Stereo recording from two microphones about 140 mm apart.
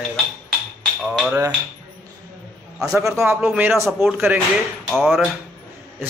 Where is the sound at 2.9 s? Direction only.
20° right (ahead or behind).